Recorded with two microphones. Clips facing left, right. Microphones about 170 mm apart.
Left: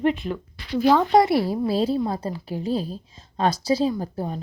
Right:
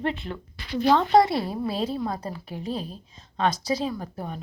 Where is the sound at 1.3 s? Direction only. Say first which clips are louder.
Left 6 dB; 20° right (ahead or behind).